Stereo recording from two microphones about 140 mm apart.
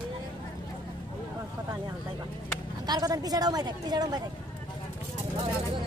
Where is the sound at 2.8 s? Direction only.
30° right (ahead or behind).